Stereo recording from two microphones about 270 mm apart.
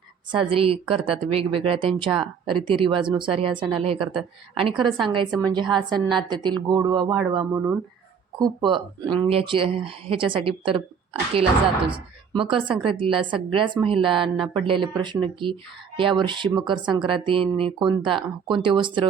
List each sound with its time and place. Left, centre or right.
0.3 s speech: right
11.9 s speech: centre